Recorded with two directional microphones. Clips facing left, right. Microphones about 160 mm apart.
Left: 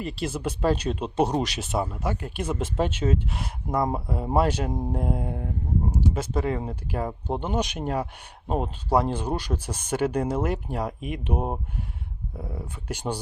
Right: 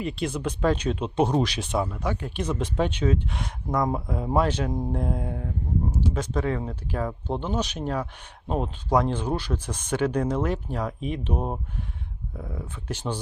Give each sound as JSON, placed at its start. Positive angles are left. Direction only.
{"t": 0.0, "sound": "speech", "side_deg": 0}
{"t": 0.6, "sound": "speech", "side_deg": 35}
{"t": 1.0, "sound": "speech", "side_deg": 5}